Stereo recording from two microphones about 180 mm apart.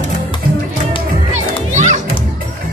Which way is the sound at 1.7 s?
40° right (ahead or behind).